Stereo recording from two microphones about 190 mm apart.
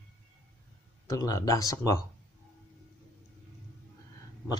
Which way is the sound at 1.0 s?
20° left (ahead or behind).